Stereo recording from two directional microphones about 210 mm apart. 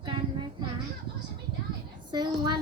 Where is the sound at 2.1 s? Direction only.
20° right (ahead or behind).